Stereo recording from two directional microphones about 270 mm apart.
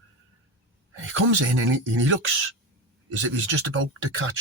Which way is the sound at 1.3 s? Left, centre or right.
Right.